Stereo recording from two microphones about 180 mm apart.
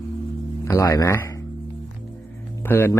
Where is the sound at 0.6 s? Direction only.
15° left (ahead or behind).